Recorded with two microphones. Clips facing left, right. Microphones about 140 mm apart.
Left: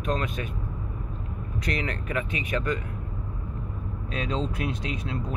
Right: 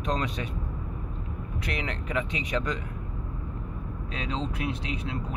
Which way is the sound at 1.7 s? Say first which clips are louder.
Right 2 dB; 15° right (ahead or behind).